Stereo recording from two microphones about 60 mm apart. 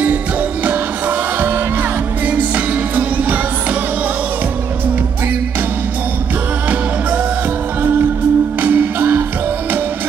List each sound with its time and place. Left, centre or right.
0.7 s music: right
8.5 s music: right